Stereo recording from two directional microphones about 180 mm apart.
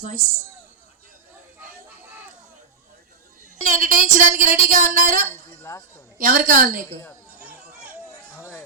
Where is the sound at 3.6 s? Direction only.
50° right (ahead or behind).